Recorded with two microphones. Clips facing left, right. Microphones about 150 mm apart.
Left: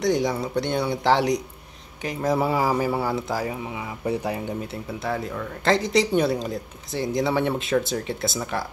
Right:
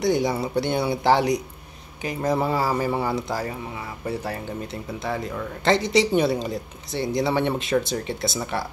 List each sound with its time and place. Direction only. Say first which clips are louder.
0.0 s speech: right 1 dB; 5° right (ahead or behind)
4.0 s speech: left 3 dB; 15° left (ahead or behind)
5.0 s speech: even; centre (ahead or behind)